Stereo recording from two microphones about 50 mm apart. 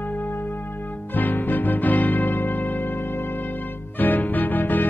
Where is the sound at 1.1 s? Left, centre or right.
Left.